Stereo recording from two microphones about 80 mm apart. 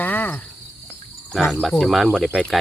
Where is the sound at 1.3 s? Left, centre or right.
Centre.